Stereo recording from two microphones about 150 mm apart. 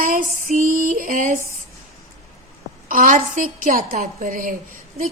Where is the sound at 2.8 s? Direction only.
65° right (ahead or behind).